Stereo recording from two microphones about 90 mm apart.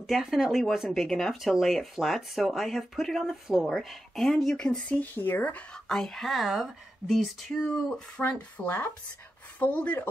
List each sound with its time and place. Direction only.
0.0 s speech: centre (ahead or behind)
5.1 s speech: 20° left (ahead or behind)
5.9 s speech: 5° left (ahead or behind)
8.2 s speech: 20° left (ahead or behind)